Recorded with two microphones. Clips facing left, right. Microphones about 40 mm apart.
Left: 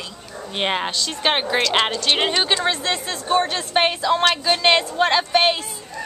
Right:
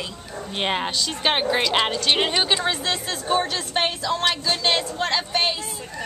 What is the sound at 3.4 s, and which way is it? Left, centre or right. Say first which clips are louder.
A woman's voice: left 4 dB; left.